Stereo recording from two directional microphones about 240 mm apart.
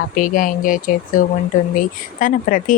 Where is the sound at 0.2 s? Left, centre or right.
Left.